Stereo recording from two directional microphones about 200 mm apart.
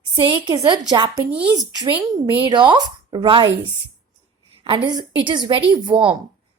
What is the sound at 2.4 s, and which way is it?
Speech, 20° right (ahead or behind).